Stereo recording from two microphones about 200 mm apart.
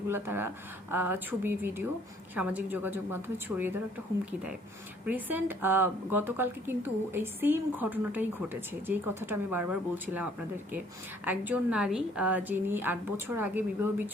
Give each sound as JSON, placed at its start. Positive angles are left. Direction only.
{"t": 0.1, "sound": "speech", "side_deg": -10}
{"t": 5.0, "sound": "speech", "side_deg": -10}
{"t": 11.3, "sound": "speech", "side_deg": -5}